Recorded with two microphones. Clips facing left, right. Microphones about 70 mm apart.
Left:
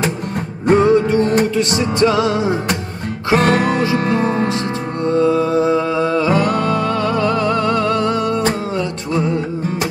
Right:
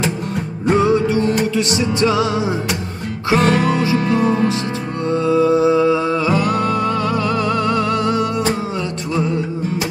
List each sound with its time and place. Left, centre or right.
0.7 s music: left